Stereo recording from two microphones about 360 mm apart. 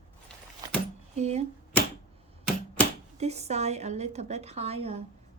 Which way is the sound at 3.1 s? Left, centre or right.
Centre.